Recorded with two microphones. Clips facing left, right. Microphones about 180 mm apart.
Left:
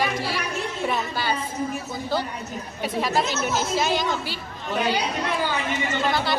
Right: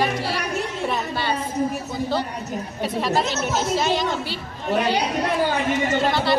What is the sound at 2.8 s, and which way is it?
Speech, centre (ahead or behind).